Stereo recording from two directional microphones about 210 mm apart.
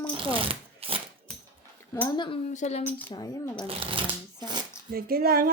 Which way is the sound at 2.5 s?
30° left (ahead or behind).